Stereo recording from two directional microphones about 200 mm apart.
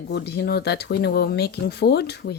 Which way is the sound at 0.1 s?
55° left (ahead or behind).